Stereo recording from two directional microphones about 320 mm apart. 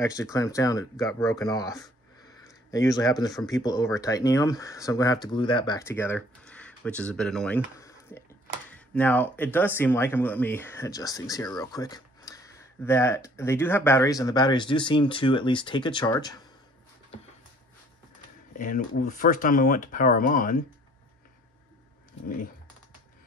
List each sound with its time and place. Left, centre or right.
0.0 s speech: centre
18.6 s speech: left